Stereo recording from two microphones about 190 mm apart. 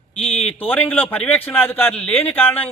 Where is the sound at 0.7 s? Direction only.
10° left (ahead or behind).